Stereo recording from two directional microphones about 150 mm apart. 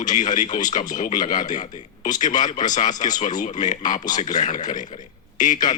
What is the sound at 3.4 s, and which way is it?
A man's voice, 55° left (ahead or behind).